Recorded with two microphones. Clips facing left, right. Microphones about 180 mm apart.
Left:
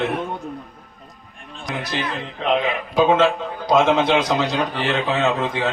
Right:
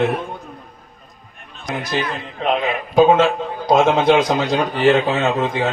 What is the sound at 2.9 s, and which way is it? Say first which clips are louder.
A man's voice: right 4 dB; 45° right (ahead or behind).